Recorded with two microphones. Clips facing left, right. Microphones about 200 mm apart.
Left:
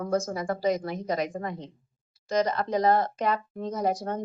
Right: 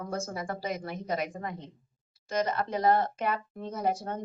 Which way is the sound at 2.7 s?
40° left (ahead or behind).